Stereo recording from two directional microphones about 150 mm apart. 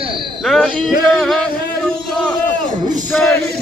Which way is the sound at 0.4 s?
Centre (ahead or behind).